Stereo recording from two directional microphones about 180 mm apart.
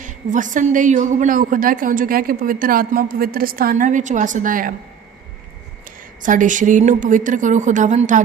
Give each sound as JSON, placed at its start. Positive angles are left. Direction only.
{"t": 0.0, "sound": "a woman's voice", "side_deg": -45}
{"t": 6.2, "sound": "a woman's voice", "side_deg": -45}